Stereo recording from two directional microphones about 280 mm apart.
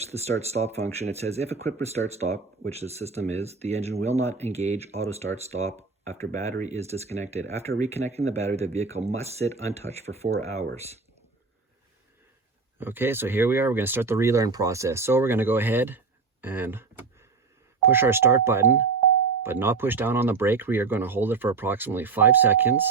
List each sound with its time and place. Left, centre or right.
0.0 s speech: right
12.8 s speech: centre